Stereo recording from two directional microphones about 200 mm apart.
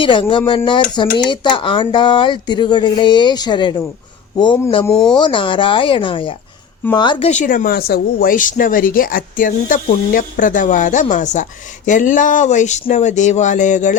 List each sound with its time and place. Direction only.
0.0 s speech: 25° left (ahead or behind)
4.9 s speech: 5° left (ahead or behind)
5.2 s speech: 25° left (ahead or behind)
7.3 s speech: 40° left (ahead or behind)